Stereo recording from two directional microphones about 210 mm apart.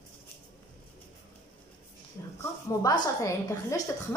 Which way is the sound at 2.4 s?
15° left (ahead or behind).